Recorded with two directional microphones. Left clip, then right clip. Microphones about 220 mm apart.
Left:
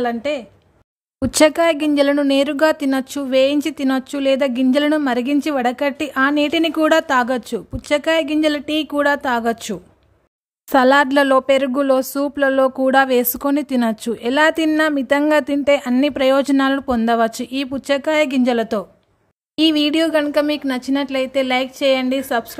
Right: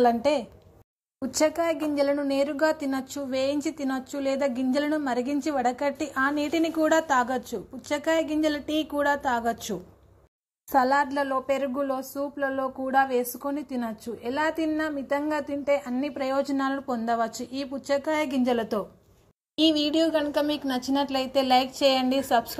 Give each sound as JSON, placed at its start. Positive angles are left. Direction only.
{"t": 0.0, "sound": "a woman's voice", "side_deg": 10}
{"t": 1.6, "sound": "a woman's voice", "side_deg": 55}
{"t": 4.3, "sound": "speech", "side_deg": 35}
{"t": 4.7, "sound": "a woman's voice", "side_deg": 55}
{"t": 6.9, "sound": "speech", "side_deg": 30}
{"t": 8.2, "sound": "a woman's voice", "side_deg": 55}
{"t": 9.0, "sound": "speech", "side_deg": 30}
{"t": 10.7, "sound": "a woman's voice", "side_deg": 50}
{"t": 11.4, "sound": "speech", "side_deg": 45}
{"t": 18.5, "sound": "a woman's voice", "side_deg": 30}